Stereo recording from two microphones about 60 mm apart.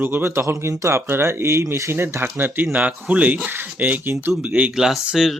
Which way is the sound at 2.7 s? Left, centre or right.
Right.